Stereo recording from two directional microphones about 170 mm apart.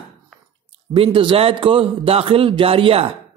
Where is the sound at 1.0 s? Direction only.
30° right (ahead or behind).